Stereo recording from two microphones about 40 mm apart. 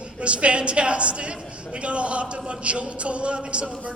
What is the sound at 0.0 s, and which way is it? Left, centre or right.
A man's voice, right.